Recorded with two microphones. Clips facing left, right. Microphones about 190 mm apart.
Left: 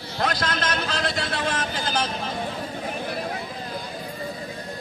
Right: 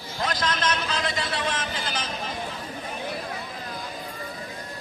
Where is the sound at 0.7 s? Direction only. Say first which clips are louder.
Left 2 dB; 40° left (ahead or behind).